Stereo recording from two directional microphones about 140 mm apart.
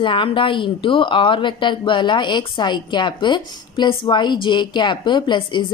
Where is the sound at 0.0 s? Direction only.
35° left (ahead or behind).